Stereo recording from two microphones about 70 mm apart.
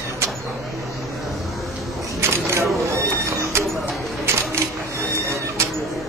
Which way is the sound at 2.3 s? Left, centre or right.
Right.